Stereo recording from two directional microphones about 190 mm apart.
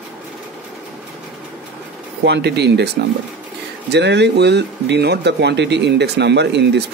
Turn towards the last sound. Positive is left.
turn(degrees=-65)  # may be behind; listen again after turning